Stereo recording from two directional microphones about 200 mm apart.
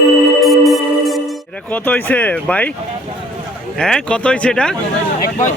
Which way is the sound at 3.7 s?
5° left (ahead or behind).